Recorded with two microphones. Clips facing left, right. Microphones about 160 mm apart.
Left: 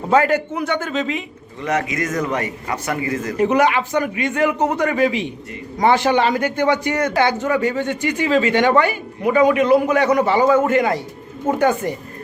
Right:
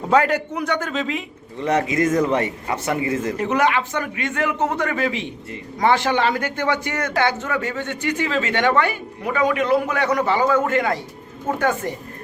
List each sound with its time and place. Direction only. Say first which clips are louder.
0.1 s a man's voice: left 2 dB; centre (ahead or behind)
1.6 s speech: right 2 dB; 30° right (ahead or behind)
3.3 s a man's voice: left 6 dB; 10° left (ahead or behind)